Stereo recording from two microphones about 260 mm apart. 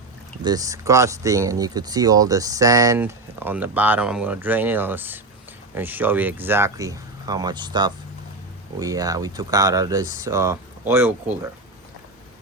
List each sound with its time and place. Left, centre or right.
0.4 s speech: centre